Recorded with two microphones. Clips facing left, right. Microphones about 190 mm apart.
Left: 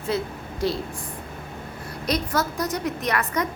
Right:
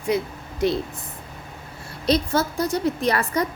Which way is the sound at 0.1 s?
15° right (ahead or behind).